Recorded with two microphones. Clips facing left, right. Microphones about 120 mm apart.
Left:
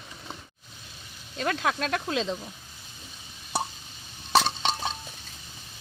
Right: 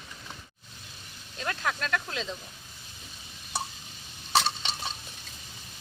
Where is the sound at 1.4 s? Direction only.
90° left.